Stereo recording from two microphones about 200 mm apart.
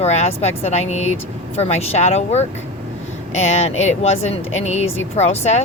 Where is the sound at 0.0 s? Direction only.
35° left (ahead or behind).